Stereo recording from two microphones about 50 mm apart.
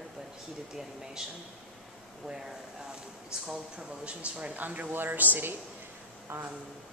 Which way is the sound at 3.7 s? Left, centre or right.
Right.